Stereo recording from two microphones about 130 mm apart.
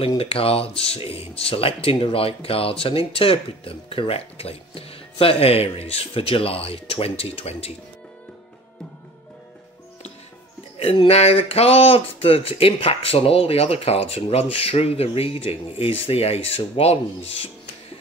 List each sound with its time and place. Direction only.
0.2 s speech: 45° left (ahead or behind)
10.8 s speech: 50° left (ahead or behind)